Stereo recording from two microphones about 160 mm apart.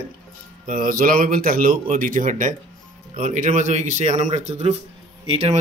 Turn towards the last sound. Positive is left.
turn(degrees=-35)  # may be behind; listen again after turning